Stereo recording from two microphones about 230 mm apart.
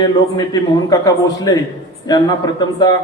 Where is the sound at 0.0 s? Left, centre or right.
Centre.